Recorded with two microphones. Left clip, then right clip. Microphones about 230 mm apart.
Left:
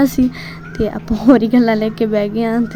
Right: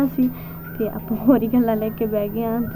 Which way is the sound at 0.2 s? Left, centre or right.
Left.